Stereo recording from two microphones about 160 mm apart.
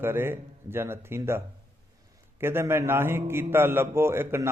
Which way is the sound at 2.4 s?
15° right (ahead or behind).